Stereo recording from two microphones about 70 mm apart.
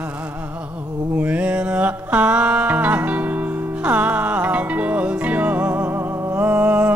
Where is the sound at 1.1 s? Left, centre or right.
Right.